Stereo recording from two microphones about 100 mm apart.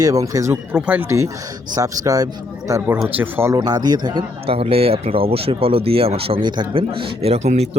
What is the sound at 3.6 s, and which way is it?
Speech, 40° right (ahead or behind).